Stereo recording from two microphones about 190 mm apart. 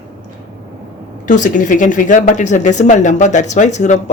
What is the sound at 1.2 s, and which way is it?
Speech, 40° left (ahead or behind).